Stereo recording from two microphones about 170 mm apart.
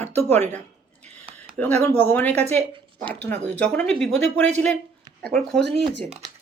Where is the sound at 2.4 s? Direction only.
30° right (ahead or behind).